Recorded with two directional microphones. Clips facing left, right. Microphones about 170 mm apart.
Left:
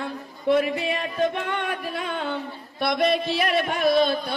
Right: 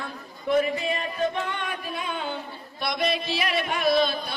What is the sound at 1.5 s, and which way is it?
Music, 65° left (ahead or behind).